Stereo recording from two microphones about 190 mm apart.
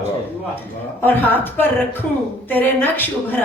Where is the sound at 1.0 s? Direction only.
10° left (ahead or behind).